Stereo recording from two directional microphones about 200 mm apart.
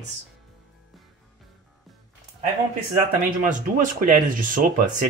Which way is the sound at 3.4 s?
40° right (ahead or behind).